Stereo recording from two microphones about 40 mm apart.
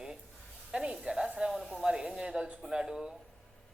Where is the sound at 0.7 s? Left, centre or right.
Right.